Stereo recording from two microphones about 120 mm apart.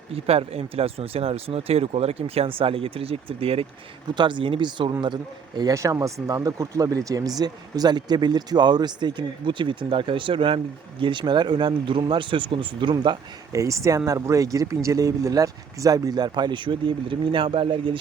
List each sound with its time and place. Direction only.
0.1 s speech: 55° right (ahead or behind)
4.1 s speech: 40° right (ahead or behind)
13.5 s speech: 25° right (ahead or behind); by 17.9 s 45° right (ahead or behind)